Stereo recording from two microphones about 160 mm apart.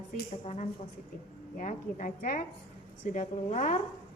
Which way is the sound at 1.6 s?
55° left (ahead or behind).